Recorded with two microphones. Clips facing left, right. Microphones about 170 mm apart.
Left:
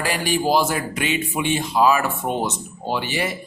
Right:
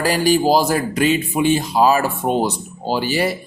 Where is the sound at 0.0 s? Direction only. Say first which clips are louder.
Right 6 dB; 40° right (ahead or behind).